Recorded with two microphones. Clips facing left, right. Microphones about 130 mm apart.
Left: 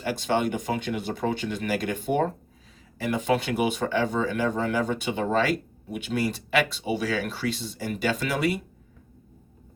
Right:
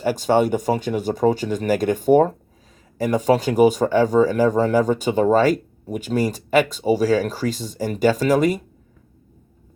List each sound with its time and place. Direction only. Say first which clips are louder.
0.0 s speech: right 7 dB; 40° right (ahead or behind)